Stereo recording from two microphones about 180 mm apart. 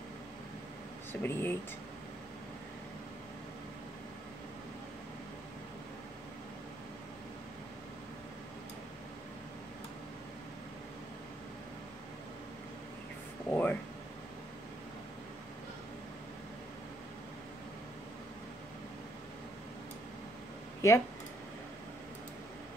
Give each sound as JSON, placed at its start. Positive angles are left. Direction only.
{"t": 1.2, "sound": "speech", "side_deg": 10}
{"t": 13.5, "sound": "a sound", "side_deg": 10}
{"t": 20.8, "sound": "speech", "side_deg": 15}